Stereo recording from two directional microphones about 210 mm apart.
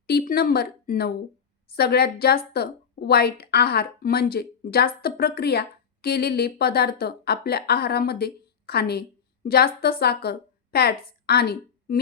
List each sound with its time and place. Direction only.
0.1 s a woman's voice: 45° left (ahead or behind)